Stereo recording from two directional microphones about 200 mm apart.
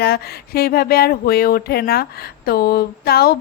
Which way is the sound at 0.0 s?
50° left (ahead or behind).